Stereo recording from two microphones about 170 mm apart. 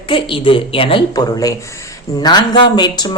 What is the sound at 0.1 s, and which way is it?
A woman's voice, 30° left (ahead or behind).